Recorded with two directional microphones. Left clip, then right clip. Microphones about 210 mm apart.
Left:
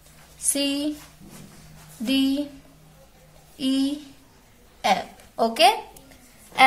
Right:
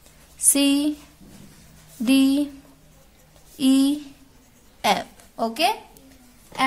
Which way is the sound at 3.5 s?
35° right (ahead or behind).